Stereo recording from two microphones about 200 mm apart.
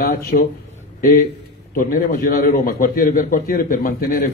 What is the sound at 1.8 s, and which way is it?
A man's voice, 45° left (ahead or behind).